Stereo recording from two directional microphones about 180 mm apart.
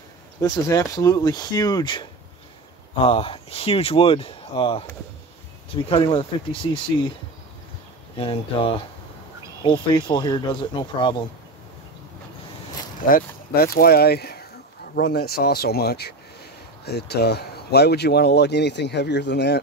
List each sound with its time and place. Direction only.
0.4 s speech: 20° left (ahead or behind)
8.2 s speech: 30° left (ahead or behind)
13.1 s speech: 55° left (ahead or behind)